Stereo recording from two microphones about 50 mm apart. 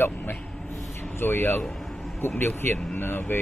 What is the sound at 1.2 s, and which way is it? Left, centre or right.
Speech, left.